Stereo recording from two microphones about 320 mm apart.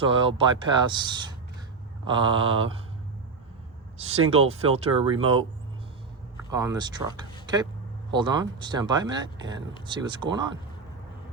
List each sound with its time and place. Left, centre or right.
0.0 s speech: centre
3.9 s speech: centre
6.5 s speech: centre
7.4 s a sound: centre
8.1 s speech: centre